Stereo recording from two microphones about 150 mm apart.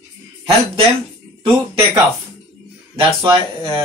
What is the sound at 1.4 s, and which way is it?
A man's voice, 35° right (ahead or behind).